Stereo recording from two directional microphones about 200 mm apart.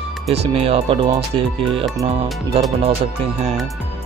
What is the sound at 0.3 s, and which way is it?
Speech, 30° right (ahead or behind).